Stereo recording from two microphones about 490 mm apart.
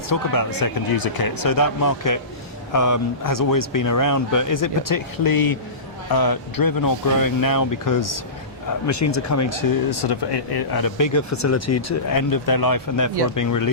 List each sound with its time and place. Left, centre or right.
0.1 s speech: left